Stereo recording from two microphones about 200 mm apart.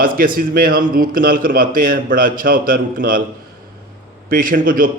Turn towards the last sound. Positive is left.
turn(degrees=-45)  # may be behind; listen again after turning